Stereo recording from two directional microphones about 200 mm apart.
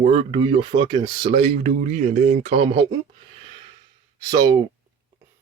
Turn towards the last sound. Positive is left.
turn(degrees=-20)  # may be behind; listen again after turning